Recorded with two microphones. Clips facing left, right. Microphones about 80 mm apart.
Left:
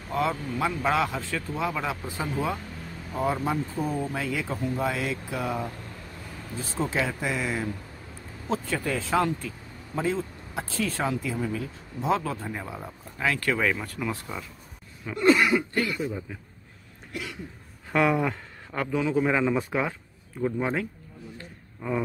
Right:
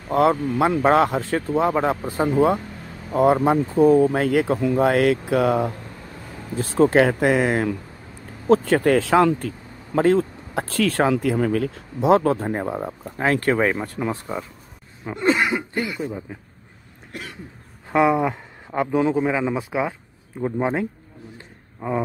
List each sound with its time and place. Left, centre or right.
0.1 s speech: right
2.3 s speech: right
9.5 s speech: right
15.0 s throat clearing: right
17.1 s cough: right
17.9 s speech: centre
19.2 s speech: centre
20.3 s throat clearing: right
21.4 s a sound: right